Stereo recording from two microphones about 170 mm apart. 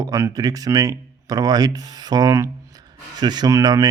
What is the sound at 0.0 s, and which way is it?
Speech, 20° right (ahead or behind).